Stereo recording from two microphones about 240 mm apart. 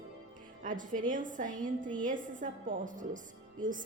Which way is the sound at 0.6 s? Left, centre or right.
Right.